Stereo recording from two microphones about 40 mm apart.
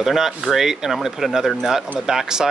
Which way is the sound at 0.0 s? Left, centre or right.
Centre.